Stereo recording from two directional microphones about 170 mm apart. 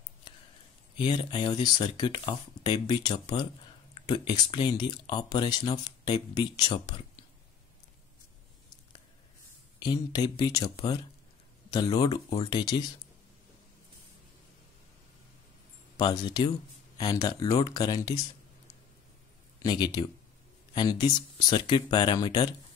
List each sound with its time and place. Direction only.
0.9 s speech: 30° left (ahead or behind)
9.8 s speech: 25° left (ahead or behind)
16.0 s speech: 25° left (ahead or behind)
19.6 s speech: 25° left (ahead or behind)